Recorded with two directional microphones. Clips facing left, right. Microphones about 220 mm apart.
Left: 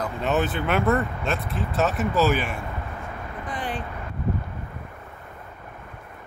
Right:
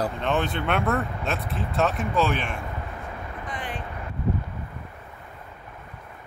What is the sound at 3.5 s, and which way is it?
Vehicle, 35° left (ahead or behind).